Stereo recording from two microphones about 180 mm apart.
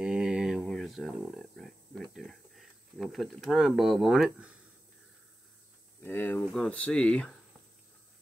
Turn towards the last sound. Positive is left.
turn(degrees=5)  # may be behind; listen again after turning